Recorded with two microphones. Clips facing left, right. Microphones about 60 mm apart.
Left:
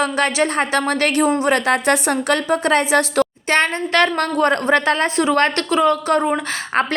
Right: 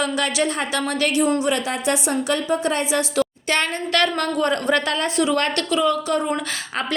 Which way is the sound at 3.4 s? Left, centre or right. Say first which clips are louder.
Left 5 dB; left.